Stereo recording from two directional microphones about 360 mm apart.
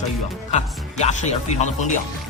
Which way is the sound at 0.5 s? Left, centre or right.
Centre.